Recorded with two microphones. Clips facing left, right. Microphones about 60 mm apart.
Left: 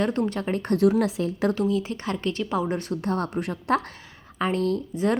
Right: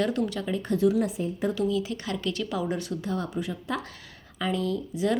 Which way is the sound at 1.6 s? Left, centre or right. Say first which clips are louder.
Left 2 dB; left.